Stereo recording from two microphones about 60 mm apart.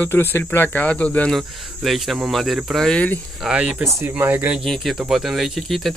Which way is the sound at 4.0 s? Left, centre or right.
Right.